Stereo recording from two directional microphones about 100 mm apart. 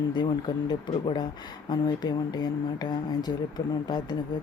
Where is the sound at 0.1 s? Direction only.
50° left (ahead or behind).